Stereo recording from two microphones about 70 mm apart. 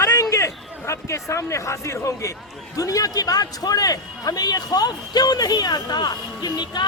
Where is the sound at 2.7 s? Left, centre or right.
Left.